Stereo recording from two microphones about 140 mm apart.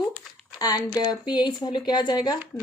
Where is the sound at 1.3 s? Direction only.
30° left (ahead or behind).